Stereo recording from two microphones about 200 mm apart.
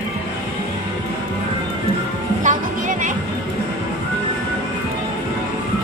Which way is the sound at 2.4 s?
40° right (ahead or behind).